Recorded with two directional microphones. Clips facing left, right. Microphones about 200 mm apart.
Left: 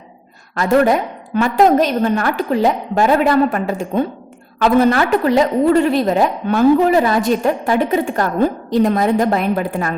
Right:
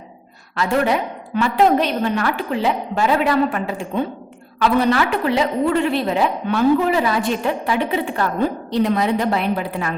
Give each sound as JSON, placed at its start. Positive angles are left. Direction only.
{"t": 0.5, "sound": "a woman's voice", "side_deg": 45}